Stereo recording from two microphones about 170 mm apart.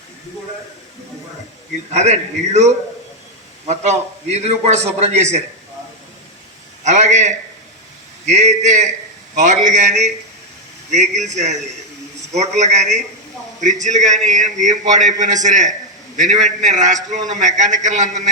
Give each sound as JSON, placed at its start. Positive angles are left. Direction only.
{"t": 1.9, "sound": "a man's voice", "side_deg": -40}
{"t": 6.8, "sound": "a man's voice", "side_deg": -45}